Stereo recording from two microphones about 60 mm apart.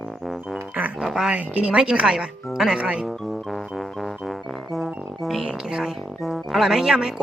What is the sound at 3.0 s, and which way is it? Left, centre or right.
Music, centre.